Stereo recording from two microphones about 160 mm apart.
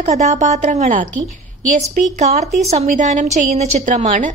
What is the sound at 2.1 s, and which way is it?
A woman's voice, 45° right (ahead or behind).